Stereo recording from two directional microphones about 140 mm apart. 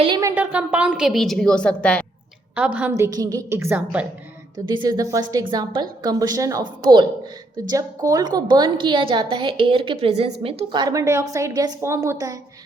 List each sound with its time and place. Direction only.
0.2 s a woman's voice: 15° right (ahead or behind); by 2.0 s 10° left (ahead or behind)
2.6 s a woman's voice: 10° right (ahead or behind)
2.9 s a woman's voice: 25° right (ahead or behind)
4.5 s a woman's voice: 30° right (ahead or behind)